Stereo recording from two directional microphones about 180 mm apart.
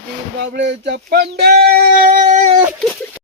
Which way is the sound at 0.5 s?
75° right (ahead or behind).